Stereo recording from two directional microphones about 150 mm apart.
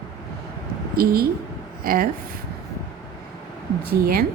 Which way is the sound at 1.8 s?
75° right (ahead or behind).